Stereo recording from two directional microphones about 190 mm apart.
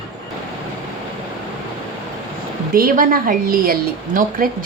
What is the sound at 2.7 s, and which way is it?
A woman's voice, 50° right (ahead or behind).